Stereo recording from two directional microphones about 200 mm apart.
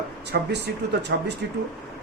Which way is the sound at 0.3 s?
55° right (ahead or behind).